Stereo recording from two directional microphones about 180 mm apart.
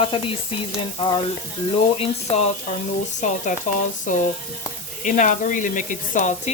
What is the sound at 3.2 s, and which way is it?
Speech, 40° left (ahead or behind).